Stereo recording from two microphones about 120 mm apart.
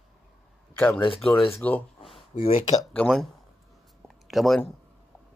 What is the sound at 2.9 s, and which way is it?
Speech, 5° left (ahead or behind).